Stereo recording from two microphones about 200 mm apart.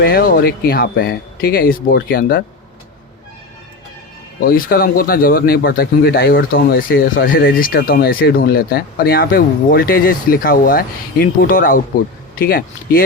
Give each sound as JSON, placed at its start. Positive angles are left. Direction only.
{"t": 0.0, "sound": "speech", "side_deg": 50}
{"t": 4.4, "sound": "speech", "side_deg": 45}